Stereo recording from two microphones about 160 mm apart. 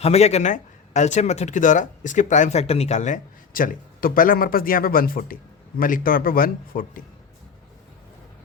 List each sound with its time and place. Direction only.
0.0 s speech: 40° left (ahead or behind); by 7.0 s 60° left (ahead or behind)